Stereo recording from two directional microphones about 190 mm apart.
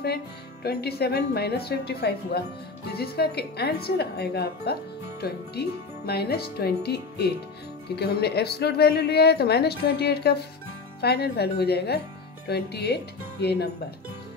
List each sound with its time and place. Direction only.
0.7 s speech: 55° left (ahead or behind)